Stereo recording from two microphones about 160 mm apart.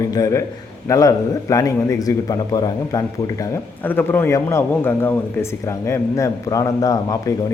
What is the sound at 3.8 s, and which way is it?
A man's voice, 10° left (ahead or behind).